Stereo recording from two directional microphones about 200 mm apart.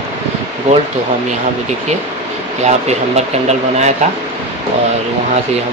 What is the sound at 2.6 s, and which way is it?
Speech, 35° right (ahead or behind).